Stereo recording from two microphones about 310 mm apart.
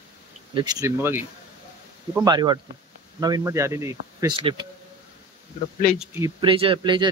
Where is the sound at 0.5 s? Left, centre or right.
Centre.